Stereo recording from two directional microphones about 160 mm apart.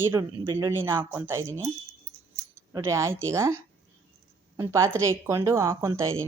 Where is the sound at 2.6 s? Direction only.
15° right (ahead or behind).